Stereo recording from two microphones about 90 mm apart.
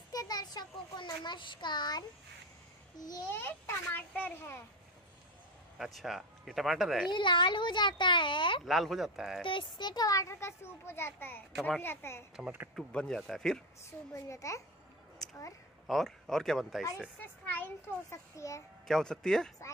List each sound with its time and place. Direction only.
0.1 s a sound: 45° left (ahead or behind)
3.0 s a child's voice: 45° left (ahead or behind)
3.3 s a child's voice: 25° left (ahead or behind)
5.9 s speech: centre (ahead or behind)
7.1 s speech: 60° left (ahead or behind)
8.6 s speech: centre (ahead or behind)
9.4 s a child's voice: 65° left (ahead or behind); by 12.3 s 30° left (ahead or behind)
12.4 s speech: 20° right (ahead or behind)
12.9 s speech: 5° left (ahead or behind)
13.8 s a child's voice: 35° left (ahead or behind)
15.9 s speech: 5° left (ahead or behind)
17.2 s a child's voice: 20° left (ahead or behind)
18.1 s a child's voice: 35° left (ahead or behind)
18.9 s speech: 5° left (ahead or behind)